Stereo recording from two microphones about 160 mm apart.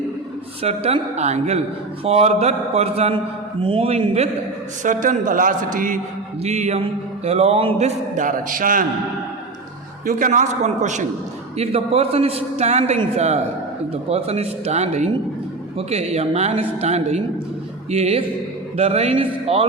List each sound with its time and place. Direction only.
0.6 s a man's voice: 40° right (ahead or behind)
4.8 s speech: 55° right (ahead or behind)
6.4 s a man's voice: 45° right (ahead or behind)
10.1 s a man's voice: 55° right (ahead or behind); by 19.6 s 35° right (ahead or behind)